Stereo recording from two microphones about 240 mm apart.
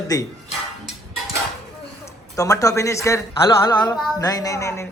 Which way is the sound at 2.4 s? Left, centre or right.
Centre.